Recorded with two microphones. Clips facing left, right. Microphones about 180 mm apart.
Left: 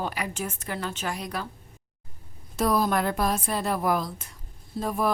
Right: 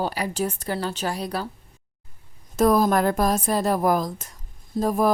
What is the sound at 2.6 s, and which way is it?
A woman's voice, 45° right (ahead or behind).